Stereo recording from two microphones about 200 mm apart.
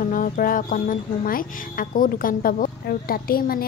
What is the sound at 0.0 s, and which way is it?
Speech, 40° left (ahead or behind).